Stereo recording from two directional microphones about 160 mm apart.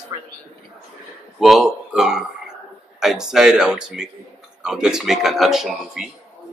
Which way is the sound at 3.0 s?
5° right (ahead or behind).